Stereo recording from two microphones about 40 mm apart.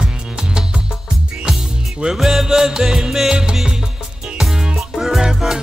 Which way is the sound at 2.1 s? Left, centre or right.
Centre.